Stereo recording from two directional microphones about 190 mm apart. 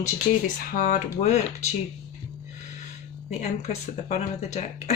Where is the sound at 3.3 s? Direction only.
35° left (ahead or behind).